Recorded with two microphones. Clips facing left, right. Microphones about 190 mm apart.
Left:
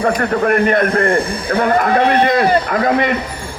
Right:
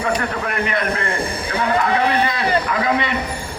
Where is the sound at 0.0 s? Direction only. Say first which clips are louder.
Left 7 dB; 45° left (ahead or behind).